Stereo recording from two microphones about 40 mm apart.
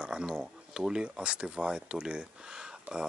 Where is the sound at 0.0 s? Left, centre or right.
Right.